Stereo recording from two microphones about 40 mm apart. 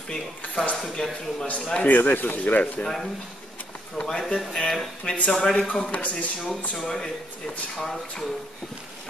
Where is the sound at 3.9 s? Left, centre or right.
Centre.